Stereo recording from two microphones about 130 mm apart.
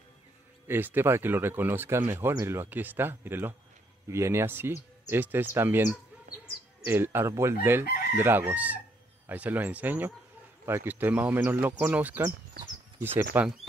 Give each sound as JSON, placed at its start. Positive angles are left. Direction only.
{"t": 0.7, "sound": "chicken", "side_deg": -15}
{"t": 4.1, "sound": "speech", "side_deg": -20}
{"t": 5.0, "sound": "chicken", "side_deg": -15}